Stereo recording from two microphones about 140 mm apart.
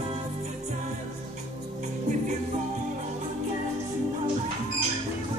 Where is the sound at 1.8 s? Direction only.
60° right (ahead or behind).